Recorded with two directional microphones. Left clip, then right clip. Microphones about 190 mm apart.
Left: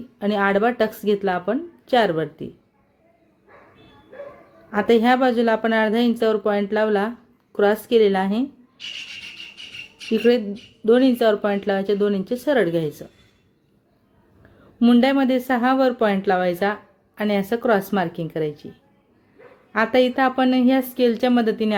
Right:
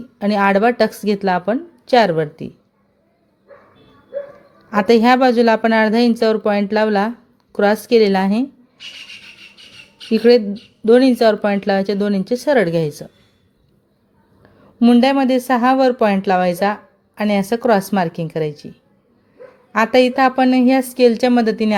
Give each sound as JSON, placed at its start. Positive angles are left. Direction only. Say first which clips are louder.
{"t": 0.2, "sound": "speech", "louder": "right 5 dB", "side_deg": -25}
{"t": 4.7, "sound": "speech", "louder": "right 5 dB", "side_deg": -25}
{"t": 10.1, "sound": "speech", "louder": "right 6 dB", "side_deg": -25}
{"t": 14.8, "sound": "speech", "louder": "right 4 dB", "side_deg": -15}
{"t": 19.7, "sound": "speech", "louder": "right 5 dB", "side_deg": -25}